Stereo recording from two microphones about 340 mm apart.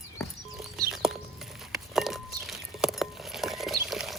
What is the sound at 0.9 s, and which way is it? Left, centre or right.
Patter, centre.